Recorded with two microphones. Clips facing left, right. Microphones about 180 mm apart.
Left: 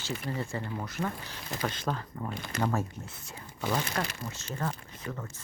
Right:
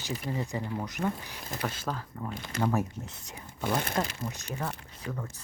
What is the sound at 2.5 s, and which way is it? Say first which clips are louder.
Speech: right 1 dB; 55° left (ahead or behind).